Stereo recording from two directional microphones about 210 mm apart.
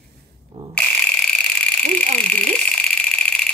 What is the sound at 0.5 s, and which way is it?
Fire alarm, 30° right (ahead or behind).